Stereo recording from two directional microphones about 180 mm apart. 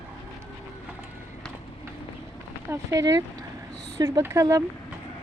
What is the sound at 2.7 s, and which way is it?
Speech, 20° right (ahead or behind).